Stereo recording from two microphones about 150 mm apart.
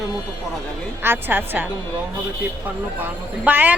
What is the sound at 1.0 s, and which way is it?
Speech, 15° right (ahead or behind).